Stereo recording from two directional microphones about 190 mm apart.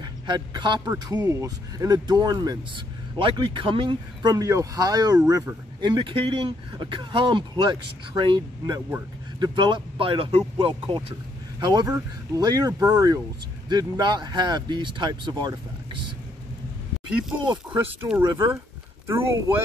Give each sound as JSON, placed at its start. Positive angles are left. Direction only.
{"t": 0.0, "sound": "speech", "side_deg": -25}
{"t": 18.2, "sound": "speech", "side_deg": -25}